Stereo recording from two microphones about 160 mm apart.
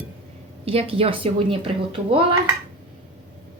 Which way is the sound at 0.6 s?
35° right (ahead or behind).